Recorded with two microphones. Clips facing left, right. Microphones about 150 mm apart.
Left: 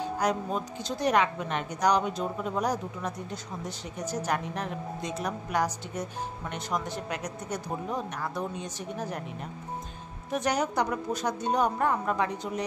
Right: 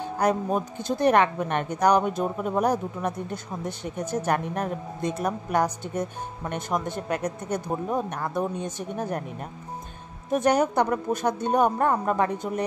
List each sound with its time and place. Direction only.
0.2 s speech: 50° right (ahead or behind)
10.3 s speech: 50° right (ahead or behind)